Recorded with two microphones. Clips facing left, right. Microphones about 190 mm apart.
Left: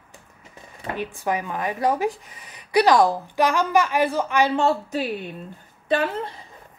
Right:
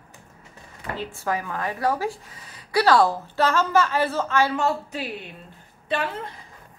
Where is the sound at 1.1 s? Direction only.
20° left (ahead or behind).